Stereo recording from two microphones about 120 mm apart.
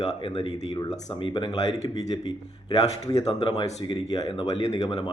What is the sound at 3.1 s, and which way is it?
Speech, 30° left (ahead or behind).